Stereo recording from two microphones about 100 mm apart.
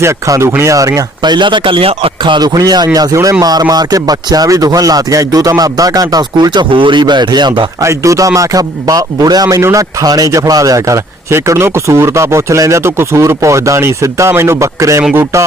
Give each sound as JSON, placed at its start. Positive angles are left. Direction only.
{"t": 0.0, "sound": "a man's voice", "side_deg": -30}
{"t": 2.2, "sound": "a man's voice", "side_deg": -50}
{"t": 7.8, "sound": "a man's voice", "side_deg": -30}